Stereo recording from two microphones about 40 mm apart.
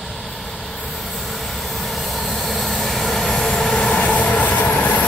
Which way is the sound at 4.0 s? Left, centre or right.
Left.